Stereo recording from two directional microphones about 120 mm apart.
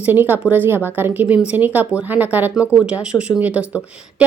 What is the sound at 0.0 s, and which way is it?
Speech, 15° right (ahead or behind).